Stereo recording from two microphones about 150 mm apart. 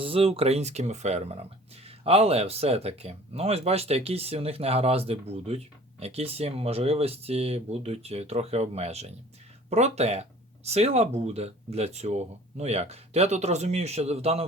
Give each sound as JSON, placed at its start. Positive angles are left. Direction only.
{"t": 0.0, "sound": "speech", "side_deg": -40}